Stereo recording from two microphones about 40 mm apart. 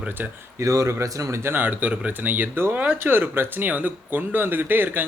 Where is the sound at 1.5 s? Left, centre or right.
Right.